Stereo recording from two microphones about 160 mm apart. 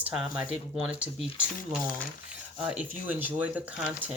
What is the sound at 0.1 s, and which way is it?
Speech, 5° right (ahead or behind).